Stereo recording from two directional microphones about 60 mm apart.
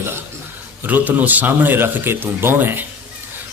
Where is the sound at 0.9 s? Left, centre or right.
Right.